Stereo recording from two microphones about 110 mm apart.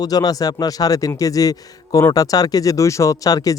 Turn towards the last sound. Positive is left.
turn(degrees=35)  # may be behind; listen again after turning